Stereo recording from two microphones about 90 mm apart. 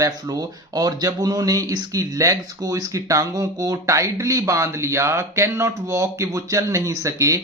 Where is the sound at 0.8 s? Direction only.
45° right (ahead or behind).